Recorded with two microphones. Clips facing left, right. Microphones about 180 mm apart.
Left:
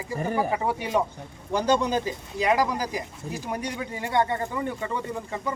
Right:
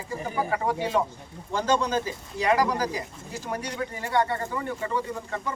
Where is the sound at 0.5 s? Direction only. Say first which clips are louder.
Even; 15° left (ahead or behind).